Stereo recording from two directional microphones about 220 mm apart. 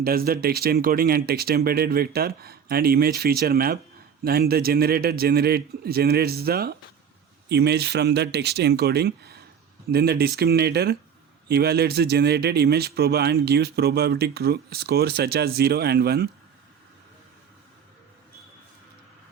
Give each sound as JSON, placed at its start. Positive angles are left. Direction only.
{"t": 0.0, "sound": "speech", "side_deg": -40}